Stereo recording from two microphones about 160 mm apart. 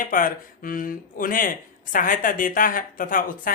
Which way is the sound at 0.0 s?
60° left (ahead or behind).